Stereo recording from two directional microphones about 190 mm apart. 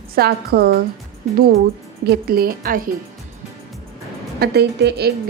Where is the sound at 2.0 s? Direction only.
50° right (ahead or behind).